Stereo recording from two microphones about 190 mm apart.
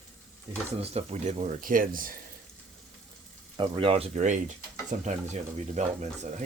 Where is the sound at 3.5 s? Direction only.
30° right (ahead or behind).